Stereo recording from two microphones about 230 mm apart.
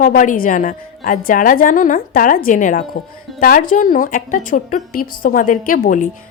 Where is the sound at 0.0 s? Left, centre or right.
Left.